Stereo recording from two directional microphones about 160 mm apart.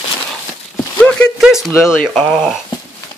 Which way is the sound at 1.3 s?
Centre (ahead or behind).